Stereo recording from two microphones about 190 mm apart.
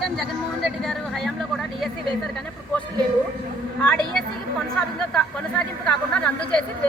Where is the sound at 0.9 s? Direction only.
Centre (ahead or behind).